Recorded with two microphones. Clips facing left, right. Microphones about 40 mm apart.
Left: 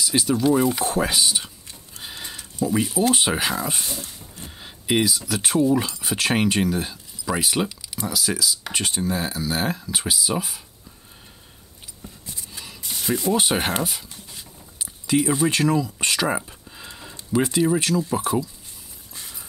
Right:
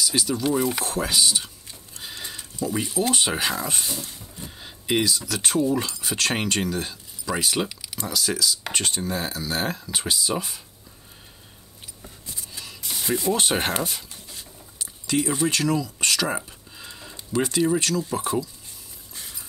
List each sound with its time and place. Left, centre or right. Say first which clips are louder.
0.0 s speech: left 3 dB; centre
0.7 s typing: left 2 dB; centre
2.6 s speech: left 4 dB; centre
13.1 s speech: left 2 dB; centre
14.3 s a sound: even; centre
15.2 s speech: left 2 dB; centre